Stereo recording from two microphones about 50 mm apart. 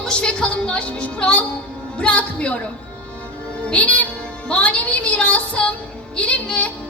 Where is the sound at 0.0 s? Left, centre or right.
Centre.